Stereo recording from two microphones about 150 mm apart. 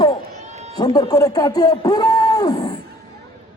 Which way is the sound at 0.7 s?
25° left (ahead or behind).